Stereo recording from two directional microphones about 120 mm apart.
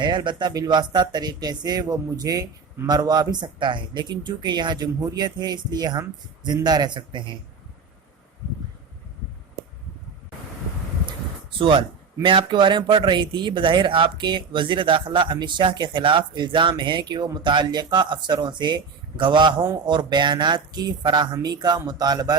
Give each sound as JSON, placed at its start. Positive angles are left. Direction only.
{"t": 0.0, "sound": "speech", "side_deg": -40}
{"t": 11.6, "sound": "speech", "side_deg": -45}